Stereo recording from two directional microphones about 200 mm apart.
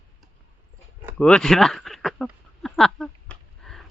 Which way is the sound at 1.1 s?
5° left (ahead or behind).